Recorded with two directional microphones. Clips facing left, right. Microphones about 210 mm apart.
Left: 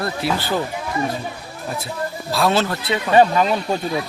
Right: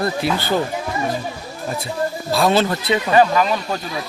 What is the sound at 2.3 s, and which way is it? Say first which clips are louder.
Speech: right 2 dB; centre (ahead or behind).